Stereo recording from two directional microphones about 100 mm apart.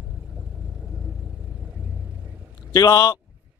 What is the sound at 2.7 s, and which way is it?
Speech, 40° left (ahead or behind).